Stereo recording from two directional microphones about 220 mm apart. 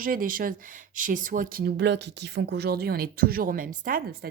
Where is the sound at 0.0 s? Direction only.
40° right (ahead or behind).